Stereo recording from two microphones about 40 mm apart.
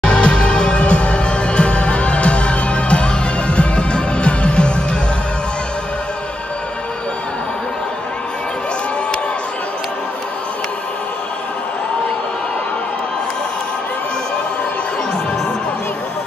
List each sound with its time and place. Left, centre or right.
0.0 s music: left